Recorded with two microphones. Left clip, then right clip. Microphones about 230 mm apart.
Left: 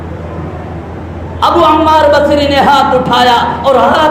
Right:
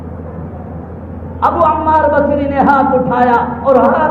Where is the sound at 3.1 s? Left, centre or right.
Left.